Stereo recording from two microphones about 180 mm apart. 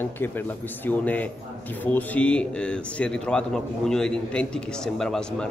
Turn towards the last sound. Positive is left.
turn(degrees=5)  # may be behind; listen again after turning